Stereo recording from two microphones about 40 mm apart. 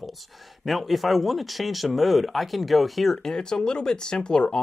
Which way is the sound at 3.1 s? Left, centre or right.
Centre.